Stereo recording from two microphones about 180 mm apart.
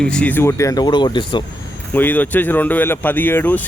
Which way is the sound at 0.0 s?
5° left (ahead or behind).